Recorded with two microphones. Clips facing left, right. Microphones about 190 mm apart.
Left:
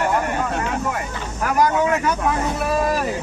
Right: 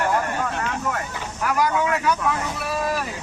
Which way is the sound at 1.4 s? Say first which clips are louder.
Left 3 dB; 45° left (ahead or behind).